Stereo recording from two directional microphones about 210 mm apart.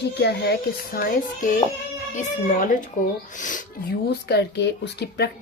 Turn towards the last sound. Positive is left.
turn(degrees=50)  # may be behind; listen again after turning